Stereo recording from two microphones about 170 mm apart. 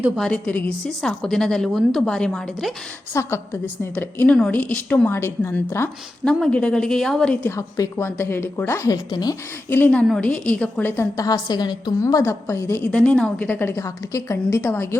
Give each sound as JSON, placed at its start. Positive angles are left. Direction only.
{"t": 0.2, "sound": "a woman's voice", "side_deg": 5}
{"t": 3.1, "sound": "a woman's voice", "side_deg": 15}
{"t": 9.6, "sound": "a woman's voice", "side_deg": 10}